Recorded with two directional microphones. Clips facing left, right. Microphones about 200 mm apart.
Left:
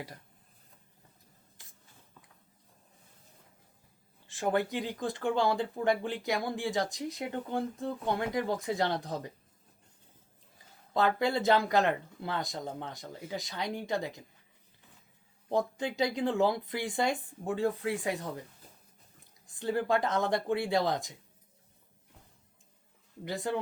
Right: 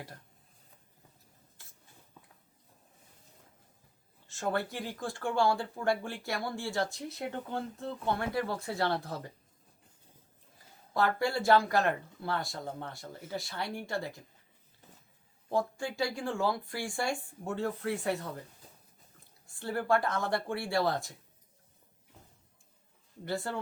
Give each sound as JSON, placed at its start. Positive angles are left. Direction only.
{"t": 4.3, "sound": "speech", "side_deg": 15}
{"t": 10.9, "sound": "speech", "side_deg": 20}
{"t": 15.4, "sound": "speech", "side_deg": 20}
{"t": 19.5, "sound": "speech", "side_deg": 15}
{"t": 23.2, "sound": "speech", "side_deg": 15}